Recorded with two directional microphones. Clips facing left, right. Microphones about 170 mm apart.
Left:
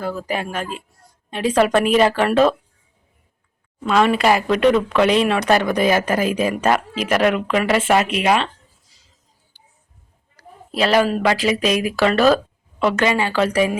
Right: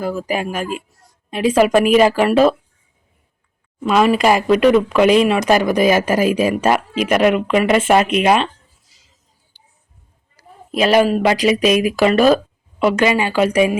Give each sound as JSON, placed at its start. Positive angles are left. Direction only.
{"t": 0.0, "sound": "speech", "side_deg": -10}
{"t": 3.8, "sound": "speech", "side_deg": -10}
{"t": 7.7, "sound": "speech", "side_deg": -20}
{"t": 10.3, "sound": "a woman's voice", "side_deg": -15}